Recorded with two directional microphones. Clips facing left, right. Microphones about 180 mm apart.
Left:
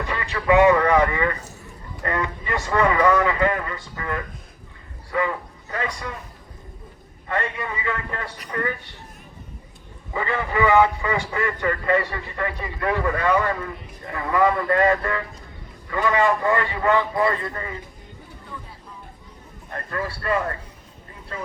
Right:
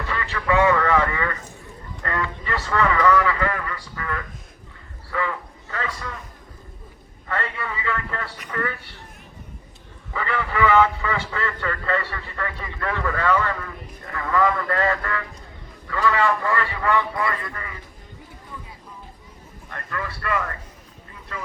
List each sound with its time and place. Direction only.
0.0 s a man's voice: 20° left (ahead or behind)
7.3 s a man's voice: 20° left (ahead or behind)
10.1 s a man's voice: 20° left (ahead or behind)
19.7 s speech: 35° left (ahead or behind)